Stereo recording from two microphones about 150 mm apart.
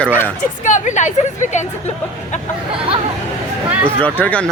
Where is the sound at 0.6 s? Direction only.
55° left (ahead or behind).